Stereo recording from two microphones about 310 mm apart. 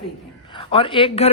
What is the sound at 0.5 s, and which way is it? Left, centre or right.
Speech, centre.